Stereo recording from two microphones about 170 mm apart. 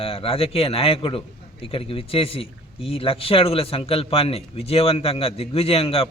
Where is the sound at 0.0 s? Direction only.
35° left (ahead or behind).